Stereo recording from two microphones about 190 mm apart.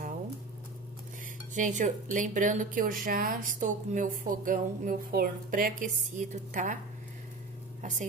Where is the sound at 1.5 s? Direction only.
40° right (ahead or behind).